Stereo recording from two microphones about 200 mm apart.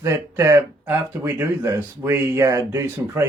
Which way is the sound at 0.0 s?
15° right (ahead or behind).